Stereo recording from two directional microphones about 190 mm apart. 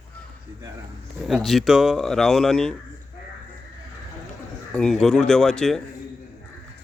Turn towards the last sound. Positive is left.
turn(degrees=5)  # may be behind; listen again after turning